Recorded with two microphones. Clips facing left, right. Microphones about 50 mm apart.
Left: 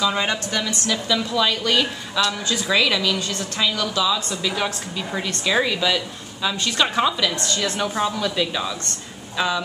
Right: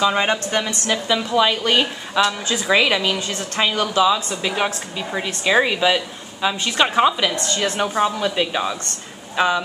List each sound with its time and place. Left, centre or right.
0.0 s speech: right
4.9 s a woman's voice: centre